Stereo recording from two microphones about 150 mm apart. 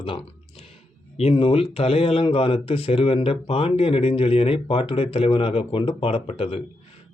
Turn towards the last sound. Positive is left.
turn(degrees=40)  # may be behind; listen again after turning